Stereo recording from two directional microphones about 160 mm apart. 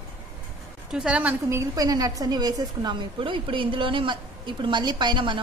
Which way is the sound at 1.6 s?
20° right (ahead or behind).